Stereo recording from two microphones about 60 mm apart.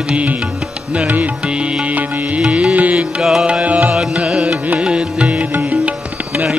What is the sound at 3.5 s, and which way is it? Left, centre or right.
Music, right.